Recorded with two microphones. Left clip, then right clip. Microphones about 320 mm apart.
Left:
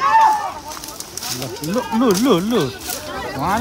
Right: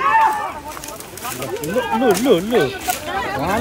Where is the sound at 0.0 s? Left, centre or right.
Left.